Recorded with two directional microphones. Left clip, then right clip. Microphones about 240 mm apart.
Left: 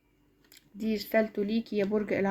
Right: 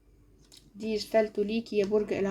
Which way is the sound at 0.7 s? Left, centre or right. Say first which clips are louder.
Right 1 dB; left.